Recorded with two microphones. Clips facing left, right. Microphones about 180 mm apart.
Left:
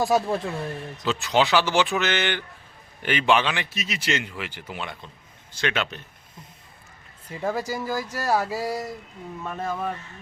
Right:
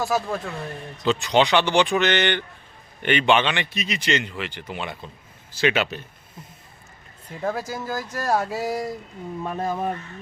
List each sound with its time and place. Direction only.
0.0 s speech: 35° left (ahead or behind)
1.0 s speech: centre (ahead or behind)
7.3 s speech: 5° left (ahead or behind)
9.4 s speech: 15° right (ahead or behind)